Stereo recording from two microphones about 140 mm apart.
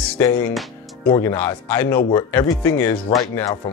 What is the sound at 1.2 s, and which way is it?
Speech, 10° left (ahead or behind).